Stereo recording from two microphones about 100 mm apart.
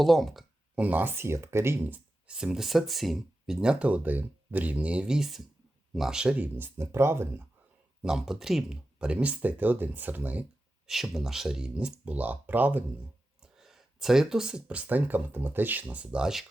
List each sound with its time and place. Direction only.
0.0 s speech: centre (ahead or behind)
0.8 s speech: 15° right (ahead or behind)
8.0 s speech: 5° right (ahead or behind)
10.8 s speech: centre (ahead or behind)
13.4 s speech: 5° right (ahead or behind)